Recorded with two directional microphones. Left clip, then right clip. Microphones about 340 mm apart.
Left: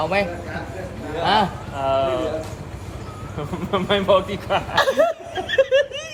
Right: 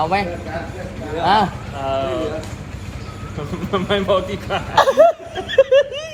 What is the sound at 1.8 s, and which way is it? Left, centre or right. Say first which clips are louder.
Speech: left 1 dB; centre.